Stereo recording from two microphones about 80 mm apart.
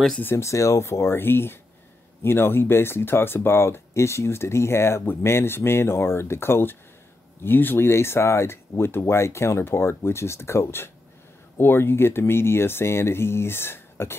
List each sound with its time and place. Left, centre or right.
0.2 s speech: left